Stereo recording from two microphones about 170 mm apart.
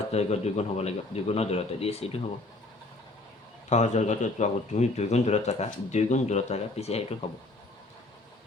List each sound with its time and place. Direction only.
0.1 s speech: 40° left (ahead or behind)
3.7 s speech: 45° left (ahead or behind)